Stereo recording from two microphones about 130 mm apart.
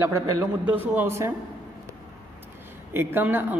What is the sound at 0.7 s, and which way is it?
Speech, 15° right (ahead or behind).